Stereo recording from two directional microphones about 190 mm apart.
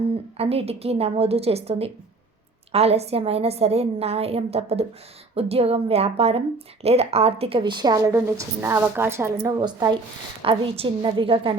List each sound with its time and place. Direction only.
0.3 s a woman's voice: 30° right (ahead or behind)